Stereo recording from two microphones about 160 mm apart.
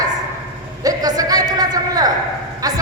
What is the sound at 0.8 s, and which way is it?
A man's voice, 25° right (ahead or behind).